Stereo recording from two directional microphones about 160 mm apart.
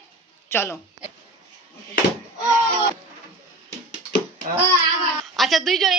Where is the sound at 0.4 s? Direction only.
15° left (ahead or behind).